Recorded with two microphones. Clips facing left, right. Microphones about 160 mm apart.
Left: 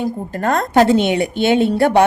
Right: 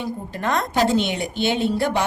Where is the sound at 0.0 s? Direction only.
45° left (ahead or behind).